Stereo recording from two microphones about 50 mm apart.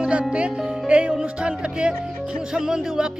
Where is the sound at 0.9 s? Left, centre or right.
Right.